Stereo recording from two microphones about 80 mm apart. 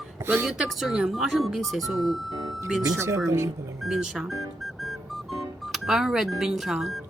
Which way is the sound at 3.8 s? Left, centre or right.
Centre.